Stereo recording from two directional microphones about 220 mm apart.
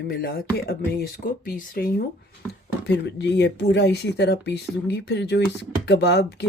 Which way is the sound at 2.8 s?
50° left (ahead or behind).